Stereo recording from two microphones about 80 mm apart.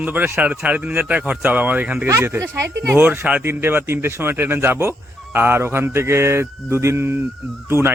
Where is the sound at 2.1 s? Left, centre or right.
Right.